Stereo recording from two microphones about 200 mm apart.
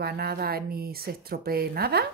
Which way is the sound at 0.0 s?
50° right (ahead or behind).